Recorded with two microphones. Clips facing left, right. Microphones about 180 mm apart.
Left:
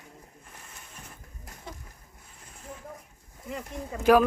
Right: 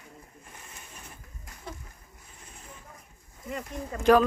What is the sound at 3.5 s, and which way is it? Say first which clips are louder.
Speech: right 1 dB; 10° left (ahead or behind).